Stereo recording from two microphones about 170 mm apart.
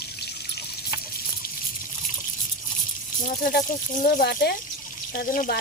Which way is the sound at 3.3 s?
55° left (ahead or behind).